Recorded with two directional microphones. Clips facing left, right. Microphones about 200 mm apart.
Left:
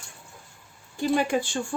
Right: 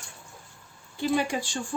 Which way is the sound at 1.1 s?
55° left (ahead or behind).